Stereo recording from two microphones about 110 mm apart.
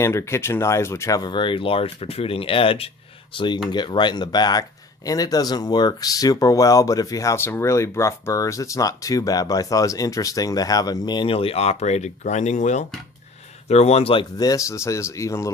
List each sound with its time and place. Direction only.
0.0 s speech: 25° left (ahead or behind)
1.2 s speech: 45° left (ahead or behind)
3.3 s speech: 45° left (ahead or behind); by 12.8 s 90° left
13.7 s speech: 75° left (ahead or behind); by 14.3 s 55° left (ahead or behind)
14.3 s speech: 35° left (ahead or behind)